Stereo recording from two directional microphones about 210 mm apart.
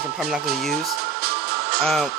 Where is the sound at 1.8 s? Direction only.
Centre (ahead or behind).